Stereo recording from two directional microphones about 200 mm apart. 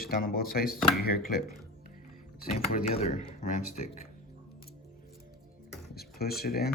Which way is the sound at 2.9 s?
35° left (ahead or behind).